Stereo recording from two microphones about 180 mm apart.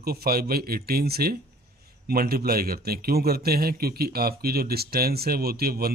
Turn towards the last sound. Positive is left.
turn(degrees=-55)  # may be behind; listen again after turning